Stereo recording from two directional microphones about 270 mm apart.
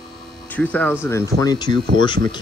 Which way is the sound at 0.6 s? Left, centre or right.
Centre.